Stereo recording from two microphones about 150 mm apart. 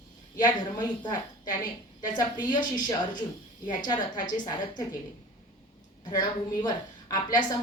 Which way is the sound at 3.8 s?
30° left (ahead or behind).